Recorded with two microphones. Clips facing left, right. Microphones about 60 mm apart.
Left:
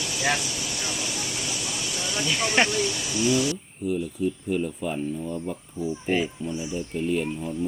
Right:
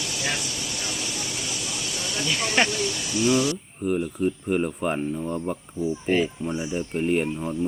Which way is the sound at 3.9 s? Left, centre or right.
Right.